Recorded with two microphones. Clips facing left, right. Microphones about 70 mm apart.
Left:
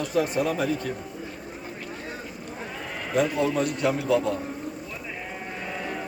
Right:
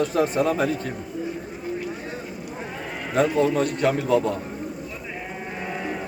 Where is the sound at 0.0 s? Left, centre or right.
Right.